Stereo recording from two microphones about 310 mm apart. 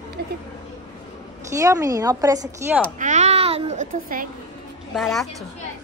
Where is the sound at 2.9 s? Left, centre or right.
Right.